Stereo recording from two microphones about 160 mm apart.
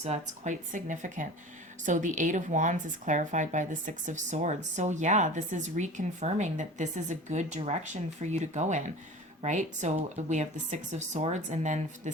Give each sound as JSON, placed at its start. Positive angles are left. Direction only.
{"t": 0.0, "sound": "a woman's voice", "side_deg": -45}